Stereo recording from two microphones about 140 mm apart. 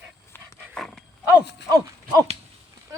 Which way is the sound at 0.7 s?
5° left (ahead or behind).